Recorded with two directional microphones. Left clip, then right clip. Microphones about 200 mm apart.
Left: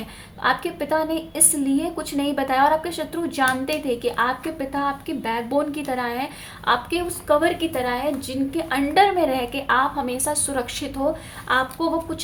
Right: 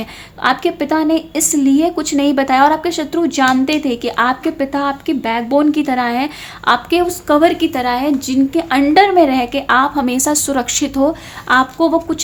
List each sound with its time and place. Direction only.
0.4 s speech: 40° right (ahead or behind)